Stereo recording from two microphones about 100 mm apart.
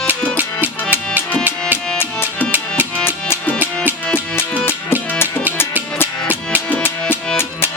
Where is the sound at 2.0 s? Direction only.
25° left (ahead or behind).